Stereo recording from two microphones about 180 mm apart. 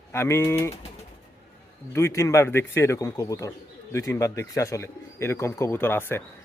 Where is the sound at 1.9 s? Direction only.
15° left (ahead or behind).